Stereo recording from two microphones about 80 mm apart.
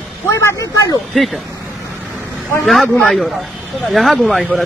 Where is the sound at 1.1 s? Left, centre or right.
Centre.